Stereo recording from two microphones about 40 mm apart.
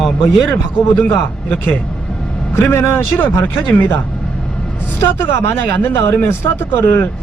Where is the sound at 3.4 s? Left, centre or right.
Left.